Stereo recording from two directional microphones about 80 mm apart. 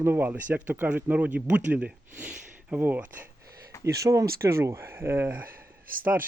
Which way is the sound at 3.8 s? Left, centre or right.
Right.